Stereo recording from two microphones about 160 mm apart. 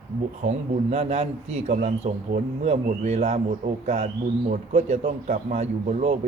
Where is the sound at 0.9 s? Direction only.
45° right (ahead or behind).